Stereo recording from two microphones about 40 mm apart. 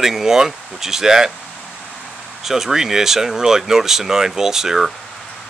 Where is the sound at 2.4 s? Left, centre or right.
Centre.